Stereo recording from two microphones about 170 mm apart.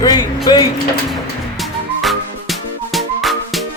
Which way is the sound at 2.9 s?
Centre (ahead or behind).